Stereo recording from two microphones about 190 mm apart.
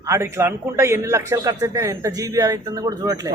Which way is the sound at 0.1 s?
15° right (ahead or behind).